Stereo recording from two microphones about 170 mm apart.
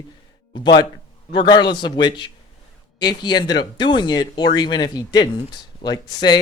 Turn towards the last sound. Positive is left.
turn(degrees=25)  # may be behind; listen again after turning